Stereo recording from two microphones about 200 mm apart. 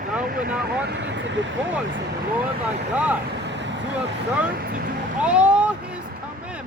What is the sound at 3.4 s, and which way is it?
Vehicle, 60° right (ahead or behind).